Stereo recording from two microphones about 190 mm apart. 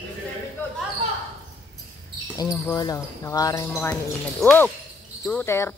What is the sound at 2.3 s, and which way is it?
Speech, 20° left (ahead or behind).